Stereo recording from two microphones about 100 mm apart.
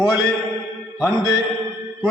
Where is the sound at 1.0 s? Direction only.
35° left (ahead or behind).